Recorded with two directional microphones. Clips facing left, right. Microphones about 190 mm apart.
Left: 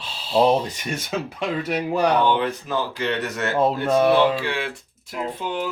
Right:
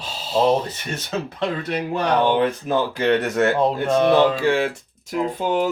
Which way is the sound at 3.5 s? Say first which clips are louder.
Even; 5° left (ahead or behind).